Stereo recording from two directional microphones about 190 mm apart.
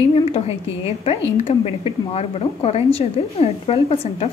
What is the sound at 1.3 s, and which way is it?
Speech, 30° left (ahead or behind).